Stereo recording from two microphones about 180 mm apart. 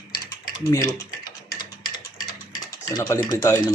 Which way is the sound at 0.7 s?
20° left (ahead or behind).